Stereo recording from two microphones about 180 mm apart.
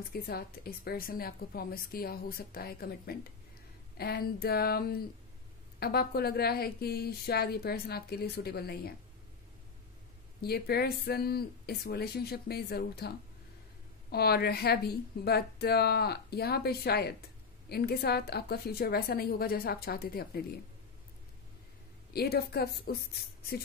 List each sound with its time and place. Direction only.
0.1 s speech: 60° left (ahead or behind)
10.4 s speech: 60° left (ahead or behind)
14.1 s speech: 60° left (ahead or behind)
22.1 s speech: 60° left (ahead or behind)